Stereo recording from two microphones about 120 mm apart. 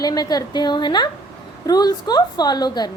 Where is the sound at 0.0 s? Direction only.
30° left (ahead or behind).